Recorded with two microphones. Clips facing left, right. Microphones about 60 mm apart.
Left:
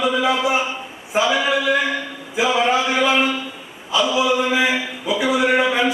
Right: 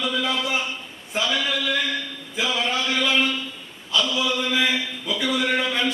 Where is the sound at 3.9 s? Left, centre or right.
Centre.